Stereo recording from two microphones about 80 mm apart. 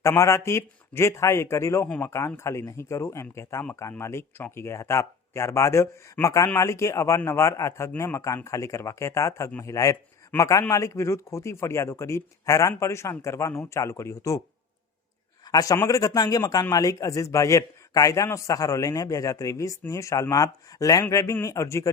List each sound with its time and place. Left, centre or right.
0.2 s a man's voice: left
15.4 s a man's voice: left